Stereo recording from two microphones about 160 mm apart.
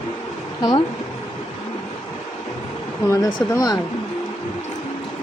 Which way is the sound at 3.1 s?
25° left (ahead or behind).